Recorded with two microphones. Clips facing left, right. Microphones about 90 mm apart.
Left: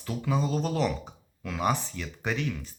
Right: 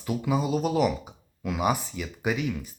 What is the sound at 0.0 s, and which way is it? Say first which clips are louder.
Speech: right 3 dB; 10° right (ahead or behind).